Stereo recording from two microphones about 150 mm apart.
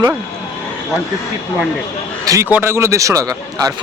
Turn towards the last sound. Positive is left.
turn(degrees=-25)  # may be behind; listen again after turning